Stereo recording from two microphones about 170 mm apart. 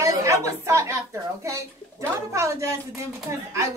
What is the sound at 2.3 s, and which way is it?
Speech, 20° right (ahead or behind).